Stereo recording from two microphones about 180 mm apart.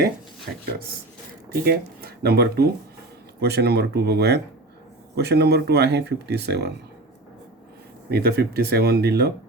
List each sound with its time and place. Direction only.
1.6 s speech: 60° right (ahead or behind)
8.1 s speech: 60° right (ahead or behind)